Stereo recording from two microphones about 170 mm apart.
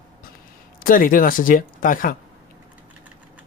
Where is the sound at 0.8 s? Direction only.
55° left (ahead or behind).